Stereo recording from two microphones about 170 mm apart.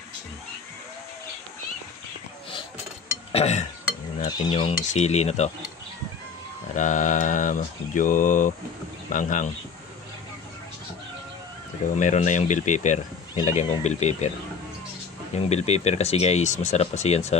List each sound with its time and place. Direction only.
3.3 s speech: 40° left (ahead or behind)
4.3 s speech: 25° left (ahead or behind)
6.7 s mantra: 45° left (ahead or behind)
12.0 s mantra: 45° left (ahead or behind)
13.5 s speech: 45° left (ahead or behind)
15.3 s speech: 40° left (ahead or behind)